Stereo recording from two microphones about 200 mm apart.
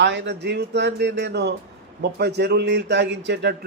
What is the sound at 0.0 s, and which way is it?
Speech, 60° right (ahead or behind).